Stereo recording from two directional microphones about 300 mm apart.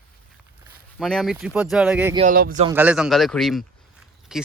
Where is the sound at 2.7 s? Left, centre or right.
Centre.